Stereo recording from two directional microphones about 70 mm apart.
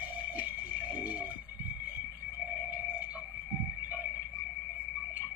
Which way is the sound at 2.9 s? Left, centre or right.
Centre.